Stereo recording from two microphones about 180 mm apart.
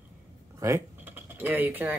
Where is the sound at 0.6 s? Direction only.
15° right (ahead or behind).